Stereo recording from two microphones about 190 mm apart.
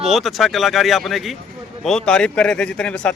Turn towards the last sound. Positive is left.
turn(degrees=5)  # may be behind; listen again after turning